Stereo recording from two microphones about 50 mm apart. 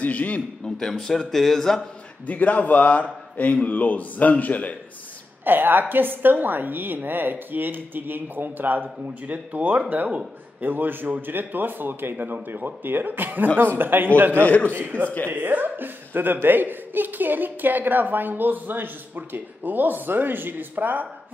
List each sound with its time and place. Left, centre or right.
0.0 s a man's voice: left
0.7 s speech: centre
2.2 s speech: left
5.4 s a woman's voice: right
14.4 s speech: left
14.7 s a woman's voice: right